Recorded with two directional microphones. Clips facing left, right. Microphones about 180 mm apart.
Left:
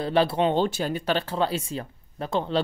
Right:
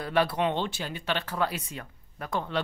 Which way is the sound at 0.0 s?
30° left (ahead or behind).